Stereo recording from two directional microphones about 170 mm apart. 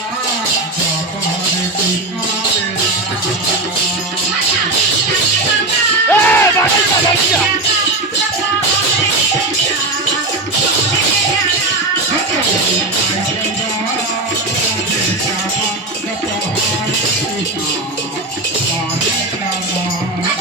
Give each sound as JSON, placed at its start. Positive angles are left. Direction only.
{"t": 6.1, "sound": "crowd", "side_deg": 10}